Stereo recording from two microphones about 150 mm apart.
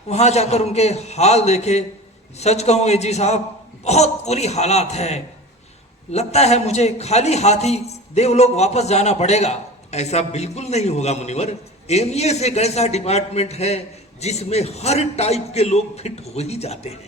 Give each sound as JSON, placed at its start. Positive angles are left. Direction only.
{"t": 0.1, "sound": "a man's voice", "side_deg": 45}